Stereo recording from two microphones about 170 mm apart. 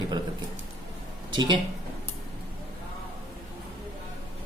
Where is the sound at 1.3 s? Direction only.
25° right (ahead or behind).